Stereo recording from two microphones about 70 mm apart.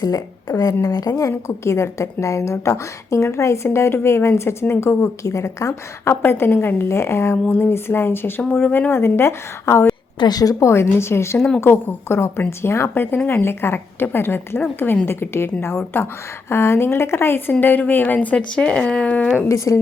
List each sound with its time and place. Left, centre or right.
0.0 s speech: left
1.3 s a woman's voice: left
6.2 s a woman's voice: left
8.6 s speech: left
8.9 s a woman's voice: left
10.2 s speech: left
10.6 s a woman's voice: left
11.3 s speech: centre
11.6 s a woman's voice: left
19.5 s a woman's voice: left